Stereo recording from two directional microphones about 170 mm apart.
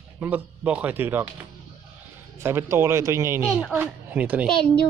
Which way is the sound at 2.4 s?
15° right (ahead or behind).